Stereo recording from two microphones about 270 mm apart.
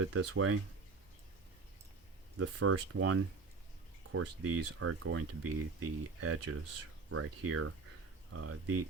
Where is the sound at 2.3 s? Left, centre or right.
Right.